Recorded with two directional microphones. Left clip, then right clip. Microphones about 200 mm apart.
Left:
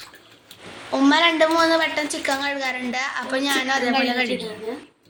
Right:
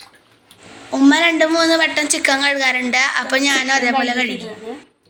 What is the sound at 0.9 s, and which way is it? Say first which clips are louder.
A woman's voice: right 4 dB; 25° right (ahead or behind).